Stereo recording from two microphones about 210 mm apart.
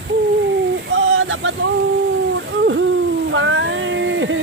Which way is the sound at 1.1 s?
70° right (ahead or behind).